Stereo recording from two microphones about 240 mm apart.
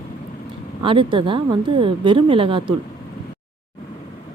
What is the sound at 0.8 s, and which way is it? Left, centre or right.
Speech, right.